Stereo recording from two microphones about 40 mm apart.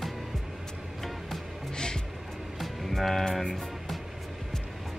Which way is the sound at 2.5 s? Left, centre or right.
Centre.